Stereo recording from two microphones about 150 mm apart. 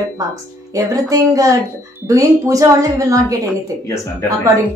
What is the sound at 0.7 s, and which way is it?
A woman's voice, 20° right (ahead or behind).